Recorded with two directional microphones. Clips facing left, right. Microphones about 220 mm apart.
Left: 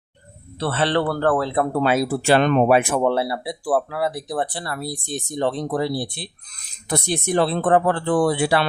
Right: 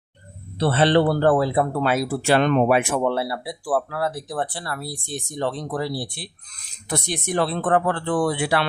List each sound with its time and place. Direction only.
0.6 s speech: 20° right (ahead or behind)
1.8 s speech: 20° left (ahead or behind)
3.2 s speech: 20° left (ahead or behind)